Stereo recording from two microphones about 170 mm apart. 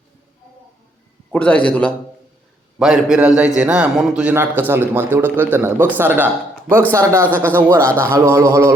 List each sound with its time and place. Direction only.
1.3 s a man's voice: 10° left (ahead or behind)
2.7 s a man's voice: 5° right (ahead or behind)
7.9 s a man's voice: 10° left (ahead or behind)
8.1 s a man's voice: 15° right (ahead or behind)